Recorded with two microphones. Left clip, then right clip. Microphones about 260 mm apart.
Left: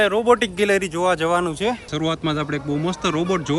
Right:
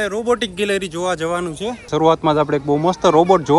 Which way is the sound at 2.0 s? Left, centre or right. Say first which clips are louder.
Right 10 dB; centre.